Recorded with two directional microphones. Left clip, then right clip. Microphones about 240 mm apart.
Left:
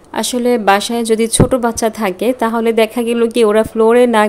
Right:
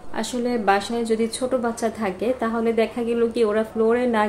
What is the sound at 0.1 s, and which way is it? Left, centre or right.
Speech, left.